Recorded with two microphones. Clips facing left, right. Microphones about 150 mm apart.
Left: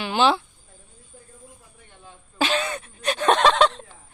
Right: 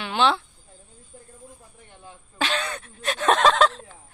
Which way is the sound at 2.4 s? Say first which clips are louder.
Left 3 dB; 5° left (ahead or behind).